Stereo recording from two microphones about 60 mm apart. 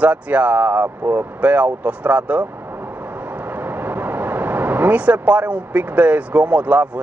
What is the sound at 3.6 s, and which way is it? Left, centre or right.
Speech, right.